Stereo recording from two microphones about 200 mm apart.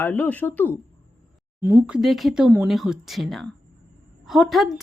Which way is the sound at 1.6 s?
15° right (ahead or behind).